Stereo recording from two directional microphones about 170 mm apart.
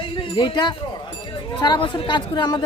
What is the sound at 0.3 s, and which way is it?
Speech, 25° left (ahead or behind).